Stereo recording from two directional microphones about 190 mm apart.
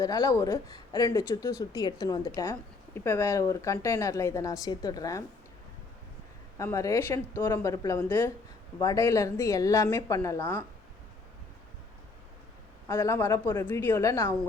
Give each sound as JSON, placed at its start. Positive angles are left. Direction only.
{"t": 0.0, "sound": "speech", "side_deg": 20}
{"t": 6.6, "sound": "speech", "side_deg": 15}
{"t": 12.9, "sound": "speech", "side_deg": 15}